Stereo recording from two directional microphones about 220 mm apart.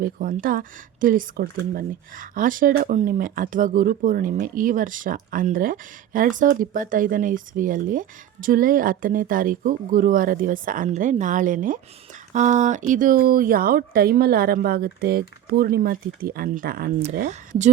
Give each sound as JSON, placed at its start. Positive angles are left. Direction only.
{"t": 0.0, "sound": "speech", "side_deg": -40}
{"t": 17.0, "sound": "speech", "side_deg": -35}